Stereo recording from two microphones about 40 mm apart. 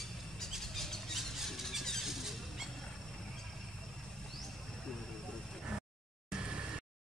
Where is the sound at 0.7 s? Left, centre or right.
Centre.